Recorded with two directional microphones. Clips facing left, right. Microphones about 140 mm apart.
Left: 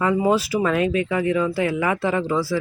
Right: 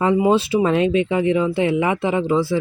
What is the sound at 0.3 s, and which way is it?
Speech, 25° right (ahead or behind).